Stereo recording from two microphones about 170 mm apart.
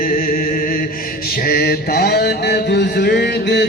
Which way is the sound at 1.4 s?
65° left (ahead or behind).